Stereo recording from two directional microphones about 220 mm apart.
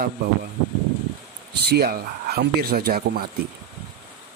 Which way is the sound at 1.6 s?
45° right (ahead or behind).